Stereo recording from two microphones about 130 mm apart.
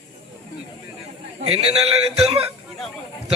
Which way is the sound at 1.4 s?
50° right (ahead or behind).